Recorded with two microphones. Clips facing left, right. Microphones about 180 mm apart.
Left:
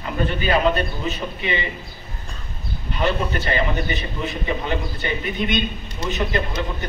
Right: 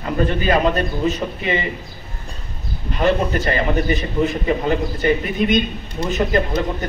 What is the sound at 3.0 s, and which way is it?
A man's voice, 45° right (ahead or behind).